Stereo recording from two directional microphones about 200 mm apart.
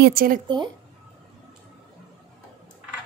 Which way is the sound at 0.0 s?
45° right (ahead or behind).